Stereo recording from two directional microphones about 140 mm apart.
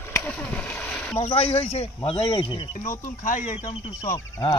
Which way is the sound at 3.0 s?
65° left (ahead or behind).